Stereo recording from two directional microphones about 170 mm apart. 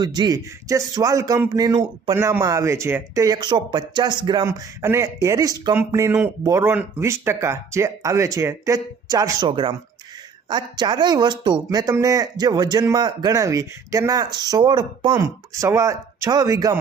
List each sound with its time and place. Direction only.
0.0 s speech: 25° right (ahead or behind)